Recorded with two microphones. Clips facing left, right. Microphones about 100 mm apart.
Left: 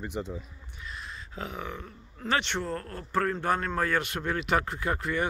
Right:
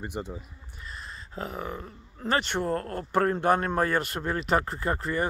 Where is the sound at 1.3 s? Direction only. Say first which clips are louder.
Right 3 dB; 40° right (ahead or behind).